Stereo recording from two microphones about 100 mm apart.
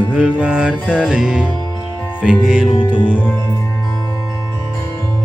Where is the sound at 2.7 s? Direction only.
60° left (ahead or behind).